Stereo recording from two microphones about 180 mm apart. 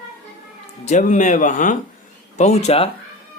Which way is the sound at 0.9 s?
45° left (ahead or behind).